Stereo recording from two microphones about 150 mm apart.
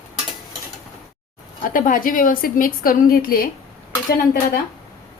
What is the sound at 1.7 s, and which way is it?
Speech, 65° left (ahead or behind).